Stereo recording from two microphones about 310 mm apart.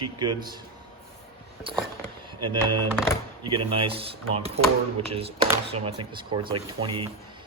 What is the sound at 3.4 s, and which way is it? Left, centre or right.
Speech, centre.